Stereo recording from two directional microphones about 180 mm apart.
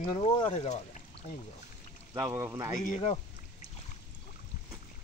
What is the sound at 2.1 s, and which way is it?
Speech, 15° right (ahead or behind).